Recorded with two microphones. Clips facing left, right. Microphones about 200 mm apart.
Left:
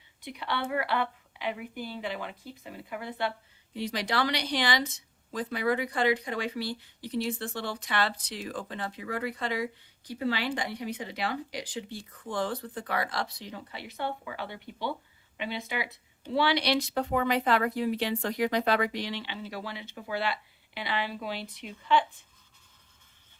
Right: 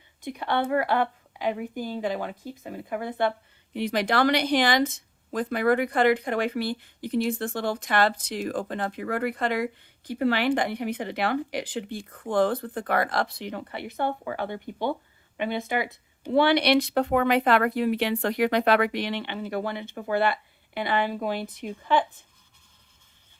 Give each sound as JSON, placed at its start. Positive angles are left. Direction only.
{"t": 0.2, "sound": "a woman's voice", "side_deg": -50}